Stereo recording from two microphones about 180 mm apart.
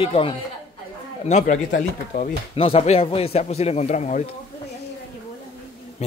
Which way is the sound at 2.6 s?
35° left (ahead or behind).